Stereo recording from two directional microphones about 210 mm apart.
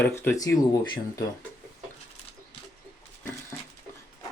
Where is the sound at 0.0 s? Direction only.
10° left (ahead or behind).